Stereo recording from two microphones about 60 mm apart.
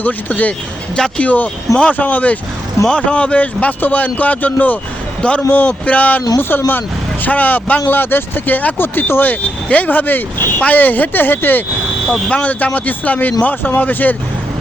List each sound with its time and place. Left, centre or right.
0.0 s speech: left
0.9 s speech: centre
1.2 s speech: left
7.3 s speech: left